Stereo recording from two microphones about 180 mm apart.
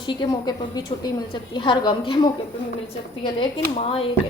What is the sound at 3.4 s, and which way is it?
Speech, 30° left (ahead or behind).